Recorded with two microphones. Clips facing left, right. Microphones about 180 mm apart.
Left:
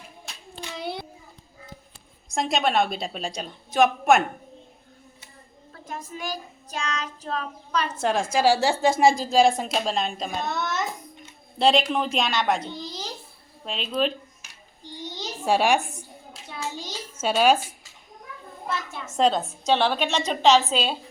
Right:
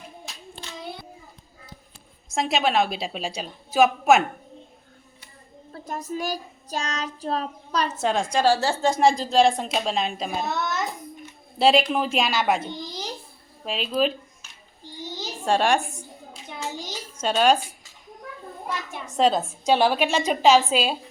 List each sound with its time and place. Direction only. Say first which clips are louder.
0.7 s child singing: left 5 dB; 70° left (ahead or behind)
2.3 s a woman's voice: right 1 dB; 5° right (ahead or behind)
5.7 s child singing: right 6 dB; 40° right (ahead or behind)
7.9 s a woman's voice: left 1 dB; centre (ahead or behind)
15.4 s a woman's voice: even; 10° left (ahead or behind)
17.2 s a woman's voice: even; 5° left (ahead or behind)
18.7 s a sound: left 1 dB; 15° right (ahead or behind)
19.0 s a woman's voice: right 1 dB; centre (ahead or behind)